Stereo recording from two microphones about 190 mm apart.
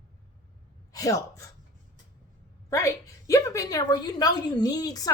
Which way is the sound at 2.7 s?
15° left (ahead or behind).